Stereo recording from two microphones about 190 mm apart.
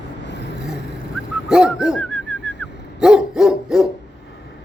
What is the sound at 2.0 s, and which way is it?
Bird, 10° left (ahead or behind).